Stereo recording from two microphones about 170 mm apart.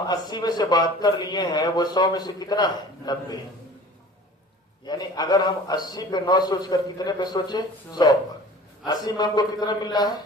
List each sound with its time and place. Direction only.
0.1 s a man's voice: 25° left (ahead or behind)
4.9 s a man's voice: 25° left (ahead or behind)